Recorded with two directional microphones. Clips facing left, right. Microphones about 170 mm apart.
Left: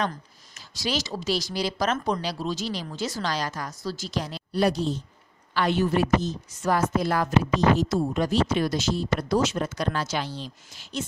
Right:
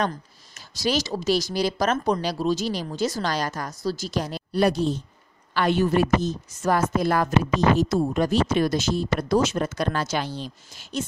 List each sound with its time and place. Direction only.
0.6 s a woman's voice: 45° right (ahead or behind)